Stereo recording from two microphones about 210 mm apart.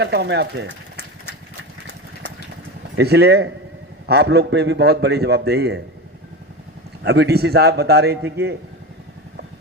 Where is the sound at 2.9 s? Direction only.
50° right (ahead or behind).